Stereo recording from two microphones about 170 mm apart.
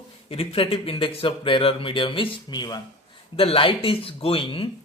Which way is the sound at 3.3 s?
35° left (ahead or behind).